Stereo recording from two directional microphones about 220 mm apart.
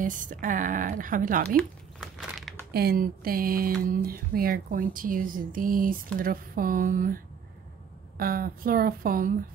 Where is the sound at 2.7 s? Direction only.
45° right (ahead or behind).